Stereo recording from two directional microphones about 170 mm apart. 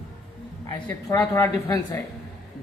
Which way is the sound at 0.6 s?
20° left (ahead or behind).